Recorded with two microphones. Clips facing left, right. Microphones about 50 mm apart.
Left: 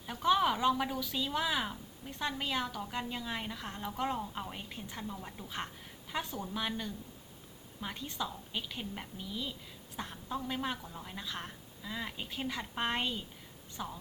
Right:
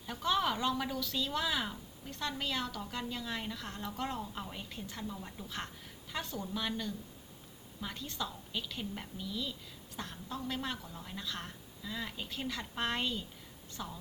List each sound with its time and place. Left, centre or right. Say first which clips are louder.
0.0 s speech: left 4 dB; centre